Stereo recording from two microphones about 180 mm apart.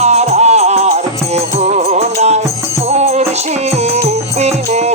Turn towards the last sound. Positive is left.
turn(degrees=-35)  # may be behind; listen again after turning